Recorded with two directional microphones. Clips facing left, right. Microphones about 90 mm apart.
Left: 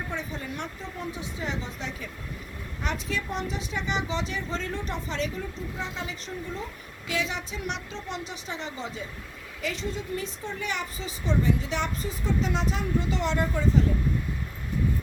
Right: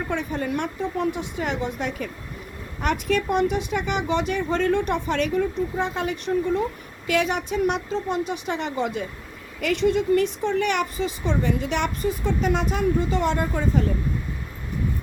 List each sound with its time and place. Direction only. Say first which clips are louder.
0.1 s a woman's voice: right 8 dB; 60° right (ahead or behind)